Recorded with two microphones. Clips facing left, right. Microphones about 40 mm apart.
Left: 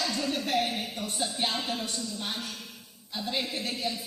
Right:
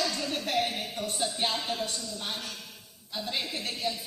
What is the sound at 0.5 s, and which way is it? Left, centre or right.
Speech, centre.